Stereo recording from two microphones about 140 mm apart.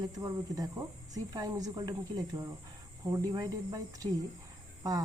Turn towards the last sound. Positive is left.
turn(degrees=-25)  # may be behind; listen again after turning